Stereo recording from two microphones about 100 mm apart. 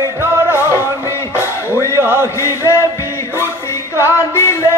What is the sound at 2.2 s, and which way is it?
Chant, 30° left (ahead or behind).